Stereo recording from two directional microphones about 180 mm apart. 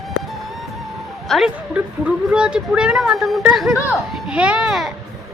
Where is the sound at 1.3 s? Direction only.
5° right (ahead or behind).